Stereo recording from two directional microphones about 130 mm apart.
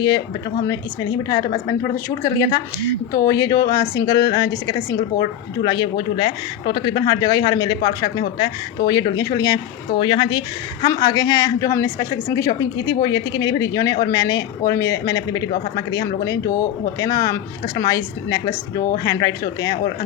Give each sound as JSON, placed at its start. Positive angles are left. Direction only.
{"t": 0.7, "sound": "a woman's voice", "side_deg": 30}